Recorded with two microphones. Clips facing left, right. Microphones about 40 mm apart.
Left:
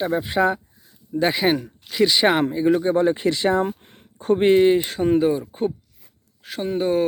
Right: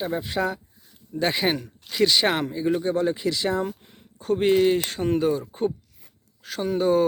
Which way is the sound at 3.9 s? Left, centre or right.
Left.